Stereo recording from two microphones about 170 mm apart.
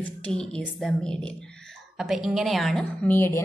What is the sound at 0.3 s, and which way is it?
A woman's voice, 5° left (ahead or behind).